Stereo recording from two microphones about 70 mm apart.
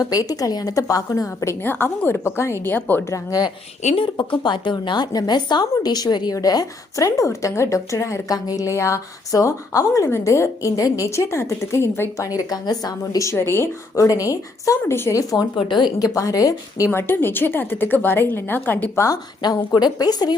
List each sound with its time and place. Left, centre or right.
0.0 s a woman's voice: left
1.8 s a woman's voice: left
4.2 s a woman's voice: left
6.3 s a woman's voice: left
12.5 s a woman's voice: left
13.2 s a woman's voice: left
16.9 s a woman's voice: left
19.1 s a woman's voice: left